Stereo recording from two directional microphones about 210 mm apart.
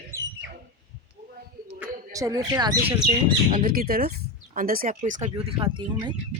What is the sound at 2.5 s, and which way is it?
Speech, 15° right (ahead or behind).